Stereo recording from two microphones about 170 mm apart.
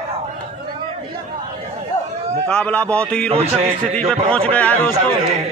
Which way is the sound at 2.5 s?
5° left (ahead or behind).